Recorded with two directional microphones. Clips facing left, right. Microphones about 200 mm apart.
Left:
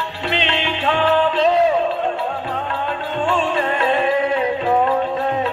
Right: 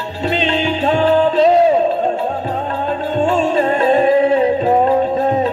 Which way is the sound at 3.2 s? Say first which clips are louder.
Right 5 dB; 40° right (ahead or behind).